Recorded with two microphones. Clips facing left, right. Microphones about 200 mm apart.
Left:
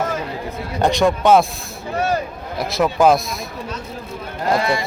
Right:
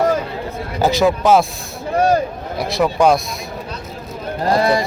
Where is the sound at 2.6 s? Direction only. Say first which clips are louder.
Right 1 dB; centre (ahead or behind).